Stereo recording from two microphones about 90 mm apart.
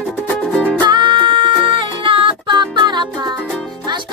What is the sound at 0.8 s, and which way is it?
Music, 55° right (ahead or behind).